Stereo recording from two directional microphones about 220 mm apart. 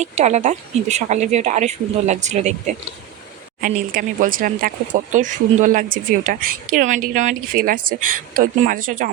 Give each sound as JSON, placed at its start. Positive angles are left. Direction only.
{"t": 0.0, "sound": "speech", "side_deg": -30}